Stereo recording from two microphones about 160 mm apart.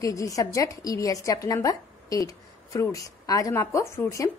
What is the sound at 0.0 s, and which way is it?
A woman's voice, 20° left (ahead or behind).